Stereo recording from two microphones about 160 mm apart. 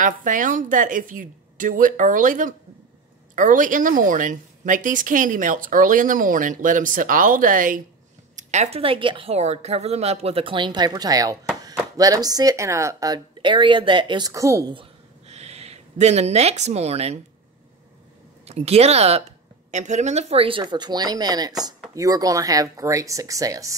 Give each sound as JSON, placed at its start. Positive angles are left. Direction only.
{"t": 0.0, "sound": "a woman's voice", "side_deg": -55}
{"t": 8.4, "sound": "a woman's voice", "side_deg": -45}
{"t": 14.7, "sound": "a sound", "side_deg": -35}
{"t": 18.4, "sound": "a woman's voice", "side_deg": -40}